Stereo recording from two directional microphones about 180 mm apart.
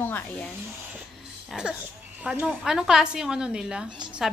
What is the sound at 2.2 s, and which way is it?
A woman's voice, 5° right (ahead or behind).